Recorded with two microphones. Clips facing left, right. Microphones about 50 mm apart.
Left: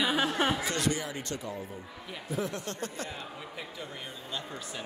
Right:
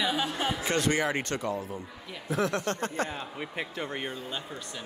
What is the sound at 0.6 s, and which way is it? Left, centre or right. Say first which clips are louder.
Speech: right 3 dB; right.